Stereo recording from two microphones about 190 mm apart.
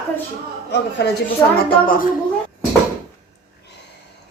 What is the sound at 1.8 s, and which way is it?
Speech, 45° left (ahead or behind).